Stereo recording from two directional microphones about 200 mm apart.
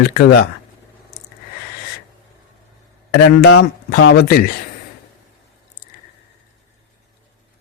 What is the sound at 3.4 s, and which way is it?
Speech, 80° left.